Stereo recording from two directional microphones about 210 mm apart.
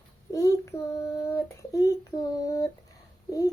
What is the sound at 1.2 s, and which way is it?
Child singing, 15° left (ahead or behind).